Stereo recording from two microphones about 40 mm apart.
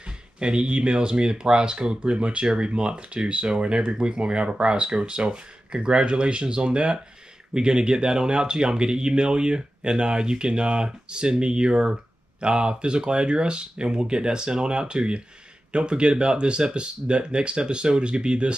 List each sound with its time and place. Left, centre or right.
0.0 s speech: right